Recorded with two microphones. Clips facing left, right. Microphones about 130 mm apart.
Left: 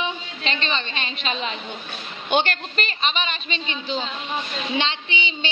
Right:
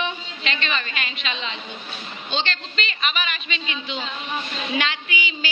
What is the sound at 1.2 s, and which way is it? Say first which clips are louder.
A woman's voice: left 3 dB; 45° left (ahead or behind).